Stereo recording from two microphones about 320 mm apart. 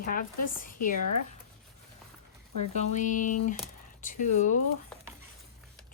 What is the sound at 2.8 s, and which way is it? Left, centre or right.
Speech, left.